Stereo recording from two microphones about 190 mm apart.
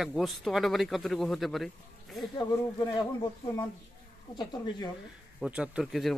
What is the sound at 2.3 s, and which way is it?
Speech, 20° left (ahead or behind).